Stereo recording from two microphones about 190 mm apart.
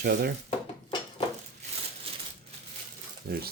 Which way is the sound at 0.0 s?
55° right (ahead or behind).